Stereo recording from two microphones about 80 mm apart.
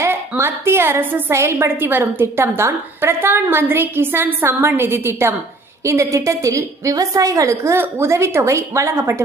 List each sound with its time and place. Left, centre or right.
0.0 s a woman's voice: right